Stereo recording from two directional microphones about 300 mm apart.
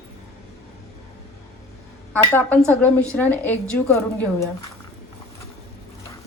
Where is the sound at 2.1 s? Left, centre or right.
Centre.